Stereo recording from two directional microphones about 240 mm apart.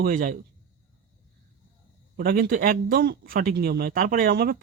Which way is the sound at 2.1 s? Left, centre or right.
Right.